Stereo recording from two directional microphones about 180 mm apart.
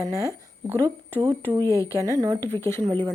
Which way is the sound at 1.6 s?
15° left (ahead or behind).